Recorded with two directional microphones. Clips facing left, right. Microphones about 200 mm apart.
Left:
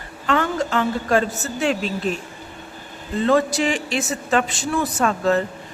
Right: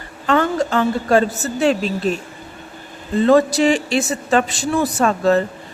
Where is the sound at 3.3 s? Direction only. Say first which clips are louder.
Right 5 dB; 35° right (ahead or behind).